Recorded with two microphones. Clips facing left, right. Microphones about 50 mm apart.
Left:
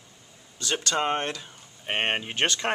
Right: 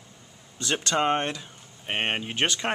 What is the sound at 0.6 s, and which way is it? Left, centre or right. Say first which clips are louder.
Speech: right 1 dB; right.